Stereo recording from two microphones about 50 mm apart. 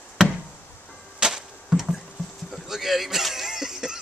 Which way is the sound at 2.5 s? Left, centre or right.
Centre.